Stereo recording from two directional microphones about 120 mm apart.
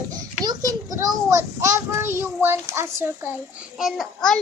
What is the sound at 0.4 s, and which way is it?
Child singing, 30° right (ahead or behind).